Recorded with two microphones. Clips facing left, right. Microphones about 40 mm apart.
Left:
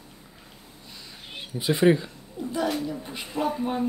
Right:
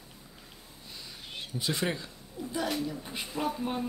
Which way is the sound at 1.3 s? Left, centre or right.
Centre.